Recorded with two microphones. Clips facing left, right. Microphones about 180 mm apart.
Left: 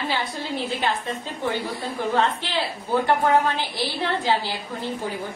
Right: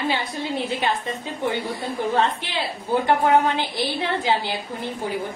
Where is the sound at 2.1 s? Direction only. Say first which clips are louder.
Left 1 dB; 15° right (ahead or behind).